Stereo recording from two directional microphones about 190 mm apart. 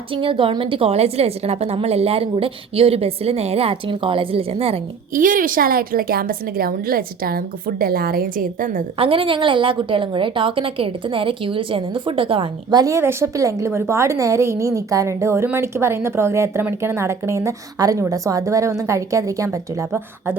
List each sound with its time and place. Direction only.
0.1 s a woman's voice: 25° right (ahead or behind)
5.1 s a woman's voice: 45° right (ahead or behind)
9.0 s a woman's voice: 30° right (ahead or behind); by 20.3 s 10° right (ahead or behind)